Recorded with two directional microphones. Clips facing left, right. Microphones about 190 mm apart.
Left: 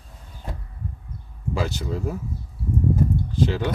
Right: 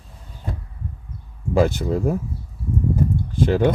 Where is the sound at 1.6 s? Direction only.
55° right (ahead or behind).